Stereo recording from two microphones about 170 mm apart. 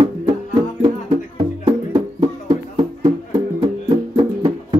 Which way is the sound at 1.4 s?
30° right (ahead or behind).